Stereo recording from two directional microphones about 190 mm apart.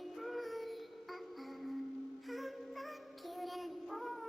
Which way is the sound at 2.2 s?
Centre (ahead or behind).